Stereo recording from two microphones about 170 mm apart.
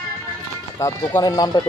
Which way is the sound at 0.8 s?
20° left (ahead or behind).